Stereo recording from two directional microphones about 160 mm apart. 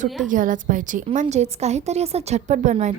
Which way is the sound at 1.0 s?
40° right (ahead or behind).